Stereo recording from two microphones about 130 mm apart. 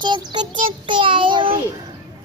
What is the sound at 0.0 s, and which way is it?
Child singing, 35° right (ahead or behind).